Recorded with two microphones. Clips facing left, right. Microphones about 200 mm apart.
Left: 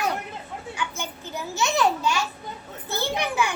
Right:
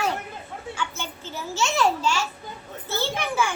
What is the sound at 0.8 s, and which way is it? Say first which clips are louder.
A child's voice: left 1 dB; 15° left (ahead or behind).